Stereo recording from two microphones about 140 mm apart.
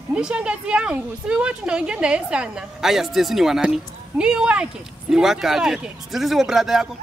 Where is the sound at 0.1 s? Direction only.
5° right (ahead or behind).